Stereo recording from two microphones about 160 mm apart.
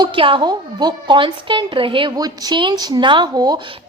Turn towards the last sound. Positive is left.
turn(degrees=-25)  # may be behind; listen again after turning